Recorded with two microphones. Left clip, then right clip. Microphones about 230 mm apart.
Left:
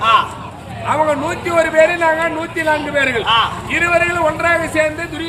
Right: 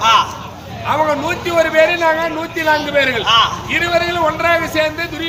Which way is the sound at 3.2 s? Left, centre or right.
Centre.